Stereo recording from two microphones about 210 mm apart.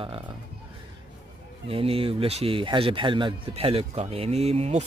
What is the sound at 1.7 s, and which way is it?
Speech, 25° right (ahead or behind).